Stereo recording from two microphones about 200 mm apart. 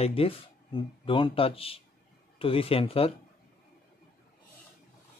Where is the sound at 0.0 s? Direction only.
30° left (ahead or behind).